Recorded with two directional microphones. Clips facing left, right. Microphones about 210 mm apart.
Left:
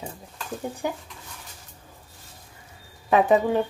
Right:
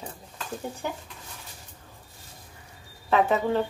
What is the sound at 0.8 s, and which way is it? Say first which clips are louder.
Speech: left 5 dB; 15° left (ahead or behind).